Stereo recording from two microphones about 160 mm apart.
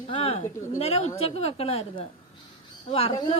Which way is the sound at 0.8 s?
40° left (ahead or behind).